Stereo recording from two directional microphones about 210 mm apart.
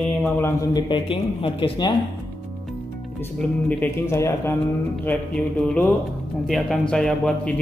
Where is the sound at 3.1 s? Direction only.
10° left (ahead or behind).